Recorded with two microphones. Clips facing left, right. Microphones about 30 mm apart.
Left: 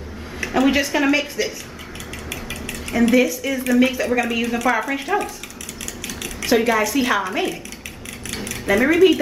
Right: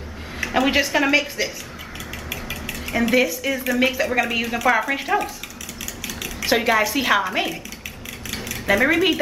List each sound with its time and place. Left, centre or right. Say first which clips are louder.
0.4 s a sound: left 1 dB; centre
0.9 s a woman's voice: even; centre
6.4 s a woman's voice: left 1 dB; centre
8.3 s cutlery: left 1 dB; centre
8.8 s a woman's voice: left 5 dB; centre